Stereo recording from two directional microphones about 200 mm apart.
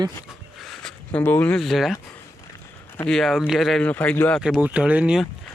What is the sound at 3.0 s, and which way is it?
Speech, centre (ahead or behind).